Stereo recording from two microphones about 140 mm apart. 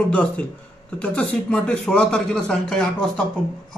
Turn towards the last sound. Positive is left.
turn(degrees=5)  # may be behind; listen again after turning